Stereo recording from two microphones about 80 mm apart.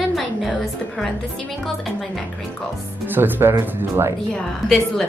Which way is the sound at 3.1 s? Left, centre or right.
Right.